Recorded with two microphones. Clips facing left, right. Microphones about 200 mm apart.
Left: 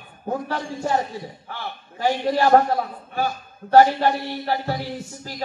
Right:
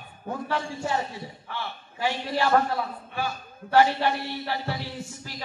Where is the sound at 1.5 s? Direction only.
45° left (ahead or behind).